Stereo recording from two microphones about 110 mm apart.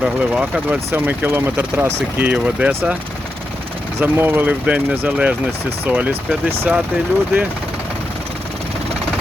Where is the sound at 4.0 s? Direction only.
20° right (ahead or behind).